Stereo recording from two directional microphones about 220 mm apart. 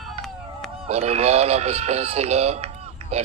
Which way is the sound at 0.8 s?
30° right (ahead or behind).